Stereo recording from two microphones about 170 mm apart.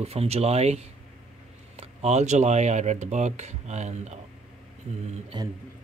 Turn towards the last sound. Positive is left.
turn(degrees=-25)  # may be behind; listen again after turning